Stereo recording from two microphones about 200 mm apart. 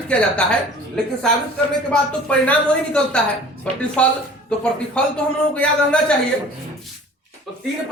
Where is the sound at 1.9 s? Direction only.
5° left (ahead or behind).